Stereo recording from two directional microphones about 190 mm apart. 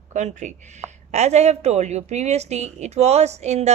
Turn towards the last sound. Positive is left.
turn(degrees=-35)  # may be behind; listen again after turning